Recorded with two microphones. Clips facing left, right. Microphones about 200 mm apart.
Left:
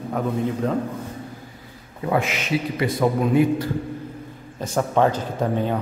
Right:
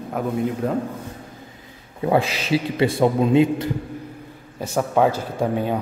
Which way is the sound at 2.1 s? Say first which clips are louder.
Right 3 dB; 35° right (ahead or behind).